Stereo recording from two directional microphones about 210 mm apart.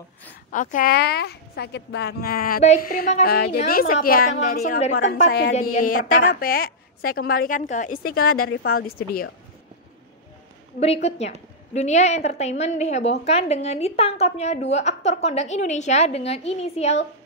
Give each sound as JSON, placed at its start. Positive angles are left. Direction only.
{"t": 0.5, "sound": "a woman's voice", "side_deg": 40}
{"t": 10.8, "sound": "a woman's voice", "side_deg": 30}